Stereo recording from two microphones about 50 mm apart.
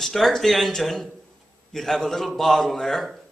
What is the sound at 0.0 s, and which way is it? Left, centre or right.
A man's voice, centre.